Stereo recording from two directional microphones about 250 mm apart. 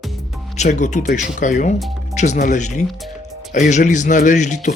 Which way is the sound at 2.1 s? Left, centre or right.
Left.